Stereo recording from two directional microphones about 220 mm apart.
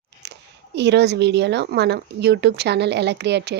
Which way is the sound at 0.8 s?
50° right (ahead or behind).